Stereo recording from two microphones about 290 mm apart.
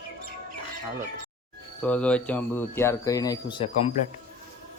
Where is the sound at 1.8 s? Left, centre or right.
Centre.